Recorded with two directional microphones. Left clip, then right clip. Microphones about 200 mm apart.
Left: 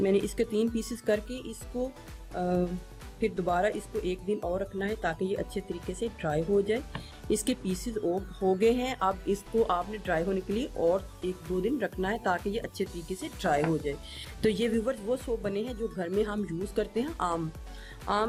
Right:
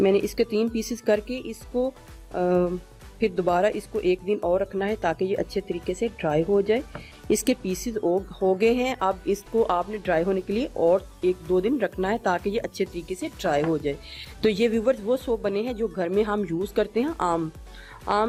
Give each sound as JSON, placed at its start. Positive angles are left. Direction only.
{"t": 0.0, "sound": "speech", "side_deg": -35}